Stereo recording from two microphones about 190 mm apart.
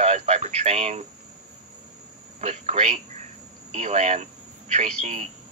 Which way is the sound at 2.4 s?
40° right (ahead or behind).